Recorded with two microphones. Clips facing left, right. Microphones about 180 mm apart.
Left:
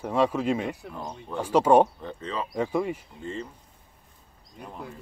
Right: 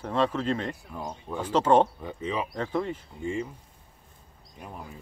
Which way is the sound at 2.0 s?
10° right (ahead or behind).